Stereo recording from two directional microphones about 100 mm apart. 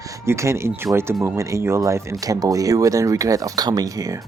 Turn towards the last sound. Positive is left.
turn(degrees=-35)  # may be behind; listen again after turning